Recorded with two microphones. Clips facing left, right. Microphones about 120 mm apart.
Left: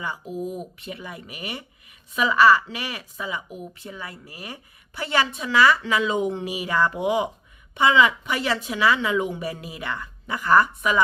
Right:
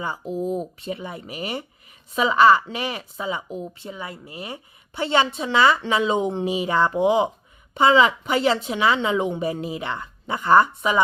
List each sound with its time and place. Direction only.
0.0 s a woman's voice: 30° right (ahead or behind)